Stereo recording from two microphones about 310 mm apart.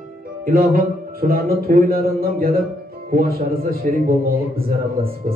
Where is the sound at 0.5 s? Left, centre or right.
Right.